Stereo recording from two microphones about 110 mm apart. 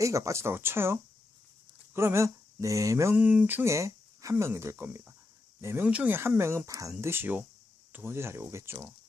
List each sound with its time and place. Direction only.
0.0 s speech: 30° right (ahead or behind)
1.9 s mantra: 25° right (ahead or behind)
3.2 s speech: 15° right (ahead or behind)
5.8 s speech: 15° right (ahead or behind); by 6.9 s 30° right (ahead or behind)
7.0 s speech: 20° right (ahead or behind)